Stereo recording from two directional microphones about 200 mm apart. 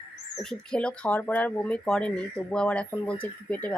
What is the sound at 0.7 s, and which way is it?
Speech, 5° left (ahead or behind).